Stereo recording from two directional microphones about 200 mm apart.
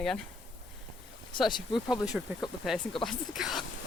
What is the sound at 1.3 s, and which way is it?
Speech, 20° left (ahead or behind).